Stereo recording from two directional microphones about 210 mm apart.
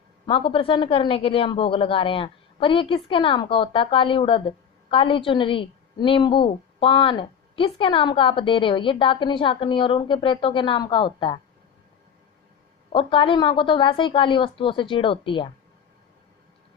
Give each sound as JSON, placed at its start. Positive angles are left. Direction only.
{"t": 0.3, "sound": "speech", "side_deg": 25}
{"t": 12.9, "sound": "speech", "side_deg": 25}